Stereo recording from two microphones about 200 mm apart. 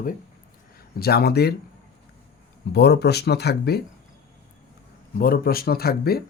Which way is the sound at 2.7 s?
55° left (ahead or behind).